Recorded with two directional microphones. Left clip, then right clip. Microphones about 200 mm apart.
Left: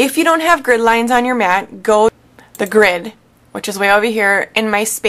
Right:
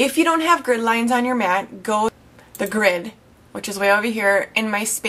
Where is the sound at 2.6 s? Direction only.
15° left (ahead or behind).